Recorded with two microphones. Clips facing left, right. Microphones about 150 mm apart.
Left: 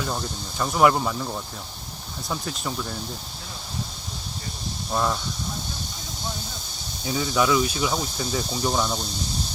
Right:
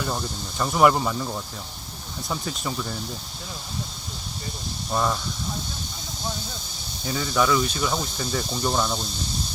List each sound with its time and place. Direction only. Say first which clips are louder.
0.6 s speech: even; centre (ahead or behind)
4.9 s speech: even; centre (ahead or behind)
7.0 s speech: even; 5° left (ahead or behind)